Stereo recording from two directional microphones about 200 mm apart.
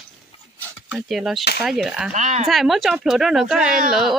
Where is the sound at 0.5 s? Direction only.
5° right (ahead or behind).